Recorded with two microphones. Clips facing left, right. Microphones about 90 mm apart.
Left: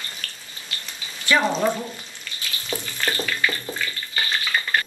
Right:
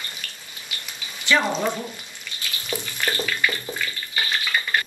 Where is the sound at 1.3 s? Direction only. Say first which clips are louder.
Left 1 dB; 15° left (ahead or behind).